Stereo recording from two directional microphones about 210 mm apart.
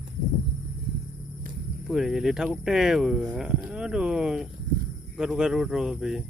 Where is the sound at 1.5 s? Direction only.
40° right (ahead or behind).